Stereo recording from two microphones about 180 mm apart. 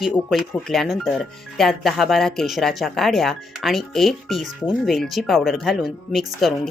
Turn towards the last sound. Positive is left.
turn(degrees=0)  # may be behind; listen again after turning